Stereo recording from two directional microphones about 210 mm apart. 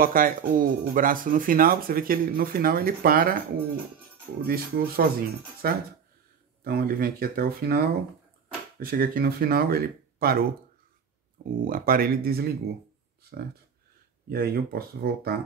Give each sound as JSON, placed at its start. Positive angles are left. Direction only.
{"t": 0.0, "sound": "speech", "side_deg": -40}
{"t": 11.5, "sound": "speech", "side_deg": -40}
{"t": 14.3, "sound": "speech", "side_deg": -45}